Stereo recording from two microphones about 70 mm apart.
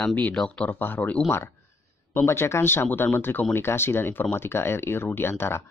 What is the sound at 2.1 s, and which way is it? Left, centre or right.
Speech, left.